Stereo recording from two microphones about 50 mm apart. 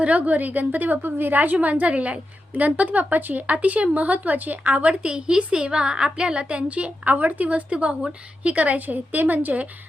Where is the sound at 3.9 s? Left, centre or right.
Right.